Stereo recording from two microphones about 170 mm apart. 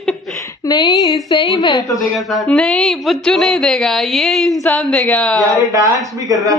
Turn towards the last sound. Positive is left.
turn(degrees=-20)  # may be behind; listen again after turning